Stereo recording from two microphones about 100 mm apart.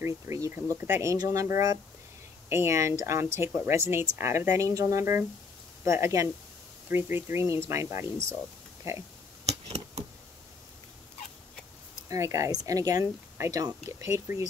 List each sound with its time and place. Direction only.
0.0 s speech: 30° right (ahead or behind)
1.1 s speech: 35° right (ahead or behind)
9.5 s a sound: 90° right
12.1 s speech: 30° right (ahead or behind)